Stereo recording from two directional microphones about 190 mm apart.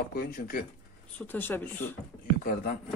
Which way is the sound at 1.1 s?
10° left (ahead or behind).